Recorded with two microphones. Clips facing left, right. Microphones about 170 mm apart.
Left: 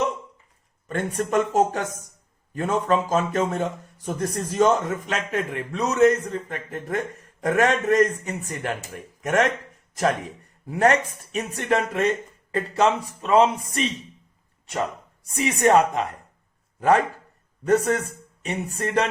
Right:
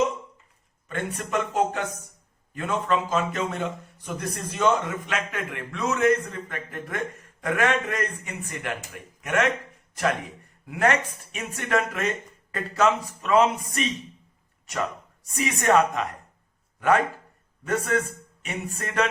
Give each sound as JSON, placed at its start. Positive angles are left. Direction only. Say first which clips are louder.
{"t": 0.9, "sound": "a man's voice", "louder": "left 5 dB", "side_deg": 45}
{"t": 10.7, "sound": "a man's voice", "louder": "left 4 dB", "side_deg": 35}
{"t": 15.4, "sound": "speech", "louder": "left 3 dB", "side_deg": 30}
{"t": 17.7, "sound": "a man's voice", "louder": "left 5 dB", "side_deg": 40}